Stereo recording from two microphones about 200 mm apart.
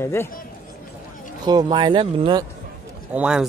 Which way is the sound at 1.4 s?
20° right (ahead or behind).